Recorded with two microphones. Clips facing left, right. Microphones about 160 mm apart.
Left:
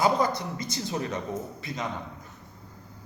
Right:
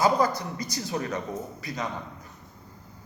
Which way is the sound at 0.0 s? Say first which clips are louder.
Right 1 dB; 20° left (ahead or behind).